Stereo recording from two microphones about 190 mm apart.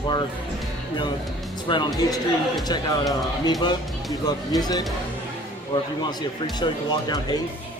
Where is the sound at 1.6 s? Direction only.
20° left (ahead or behind).